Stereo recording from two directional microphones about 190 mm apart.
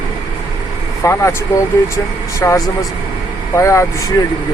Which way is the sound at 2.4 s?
15° left (ahead or behind).